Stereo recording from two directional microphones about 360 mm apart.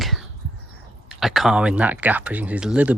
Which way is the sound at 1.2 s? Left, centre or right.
Centre.